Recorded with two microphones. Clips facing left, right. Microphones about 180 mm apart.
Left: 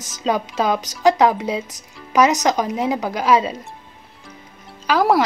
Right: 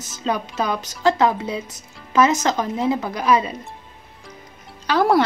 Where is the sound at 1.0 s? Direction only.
15° left (ahead or behind).